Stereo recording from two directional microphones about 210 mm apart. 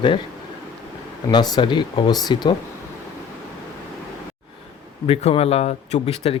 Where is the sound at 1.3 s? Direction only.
20° left (ahead or behind).